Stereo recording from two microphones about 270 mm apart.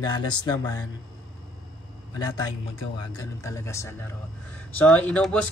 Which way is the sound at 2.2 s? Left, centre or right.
Centre.